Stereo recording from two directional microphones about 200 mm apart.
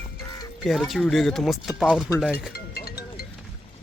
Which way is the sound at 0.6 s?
Centre (ahead or behind).